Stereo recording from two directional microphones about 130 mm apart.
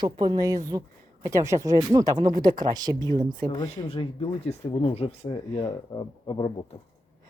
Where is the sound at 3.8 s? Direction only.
45° left (ahead or behind).